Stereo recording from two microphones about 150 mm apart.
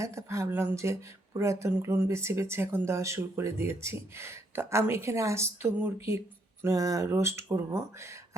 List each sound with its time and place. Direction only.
0.0 s speech: 20° right (ahead or behind)